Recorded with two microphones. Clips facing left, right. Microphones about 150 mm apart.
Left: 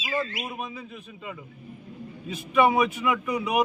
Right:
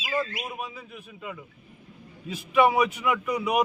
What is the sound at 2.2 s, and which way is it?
Speech, 10° right (ahead or behind).